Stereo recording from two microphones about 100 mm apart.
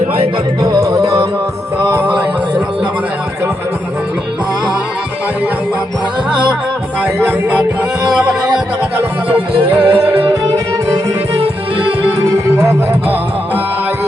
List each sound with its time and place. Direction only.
0.6 s music: 40° right (ahead or behind)
1.9 s a sound: 20° right (ahead or behind)
9.3 s music: 15° right (ahead or behind)
10.1 s music: 65° right (ahead or behind)
10.5 s music: 40° right (ahead or behind)